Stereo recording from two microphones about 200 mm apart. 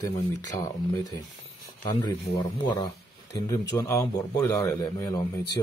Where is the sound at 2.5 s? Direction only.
20° left (ahead or behind).